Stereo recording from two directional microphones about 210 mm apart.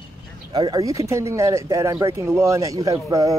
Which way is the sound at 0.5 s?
20° right (ahead or behind).